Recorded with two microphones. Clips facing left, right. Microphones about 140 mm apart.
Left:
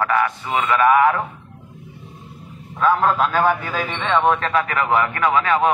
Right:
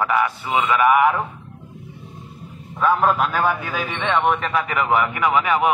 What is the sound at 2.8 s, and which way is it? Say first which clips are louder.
Speech: left 1 dB; 15° right (ahead or behind).